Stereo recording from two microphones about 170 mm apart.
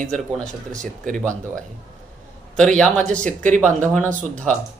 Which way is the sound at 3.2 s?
50° right (ahead or behind).